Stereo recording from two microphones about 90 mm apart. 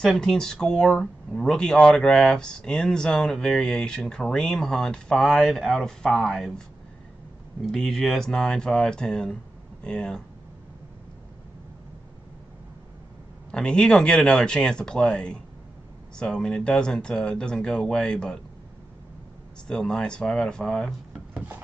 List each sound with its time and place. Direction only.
0.0 s speech: 5° left (ahead or behind)
7.6 s speech: 5° left (ahead or behind)
13.5 s speech: 10° left (ahead or behind)
19.7 s speech: 5° left (ahead or behind)
21.3 s a sound: 15° right (ahead or behind)